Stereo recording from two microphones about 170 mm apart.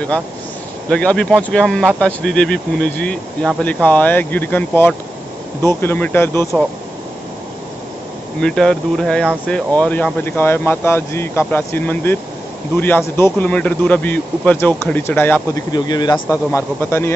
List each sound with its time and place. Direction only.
0.8 s speech: 5° left (ahead or behind)
8.4 s speech: 5° left (ahead or behind)
15.7 s speech: 25° left (ahead or behind)